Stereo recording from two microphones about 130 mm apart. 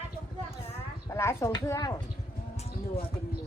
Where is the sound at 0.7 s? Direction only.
20° left (ahead or behind).